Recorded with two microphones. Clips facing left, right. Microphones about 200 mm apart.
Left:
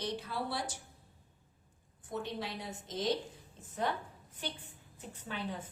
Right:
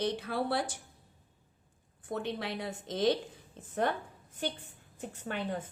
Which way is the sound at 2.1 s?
60° right (ahead or behind).